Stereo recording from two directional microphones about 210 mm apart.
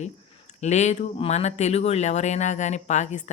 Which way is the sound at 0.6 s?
35° left (ahead or behind).